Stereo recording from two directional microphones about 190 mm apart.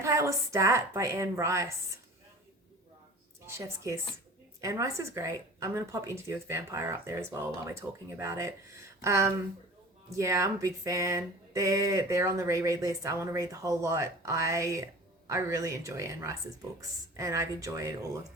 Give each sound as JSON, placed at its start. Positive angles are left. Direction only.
{"t": 0.0, "sound": "speech", "side_deg": -15}
{"t": 3.4, "sound": "speech", "side_deg": -15}